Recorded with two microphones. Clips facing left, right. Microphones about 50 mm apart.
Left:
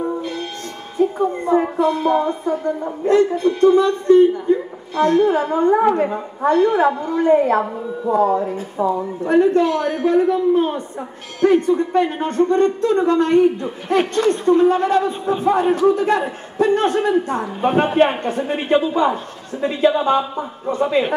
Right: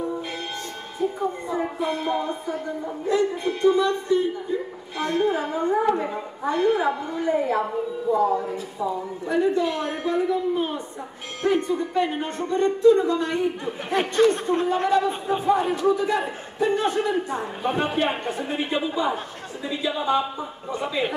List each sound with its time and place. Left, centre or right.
0.9 s a man's voice: left